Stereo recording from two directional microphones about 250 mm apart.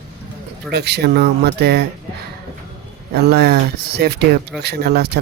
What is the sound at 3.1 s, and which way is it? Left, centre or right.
Speech, right.